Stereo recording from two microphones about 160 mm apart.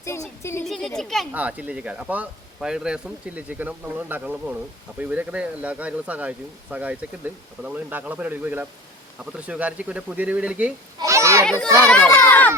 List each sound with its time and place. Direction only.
0.0 s speech: 15° left (ahead or behind)
0.7 s a child's voice: centre (ahead or behind)
1.3 s speech: 10° right (ahead or behind)
11.0 s a child's voice: 20° right (ahead or behind)
11.4 s a child's voice: 5° left (ahead or behind)